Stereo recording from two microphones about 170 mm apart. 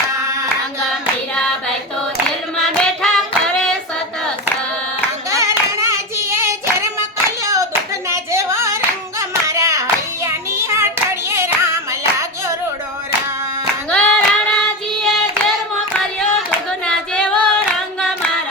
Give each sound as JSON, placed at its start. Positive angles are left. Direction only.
{"t": 2.6, "sound": "hands", "side_deg": 0}
{"t": 5.3, "sound": "hands", "side_deg": -20}
{"t": 6.4, "sound": "clapping", "side_deg": -15}
{"t": 8.1, "sound": "a sound", "side_deg": -15}
{"t": 9.5, "sound": "child singing", "side_deg": -20}
{"t": 11.3, "sound": "hands", "side_deg": -15}
{"t": 13.9, "sound": "singing", "side_deg": 5}
{"t": 15.0, "sound": "hands", "side_deg": 0}
{"t": 16.8, "sound": "singing", "side_deg": 5}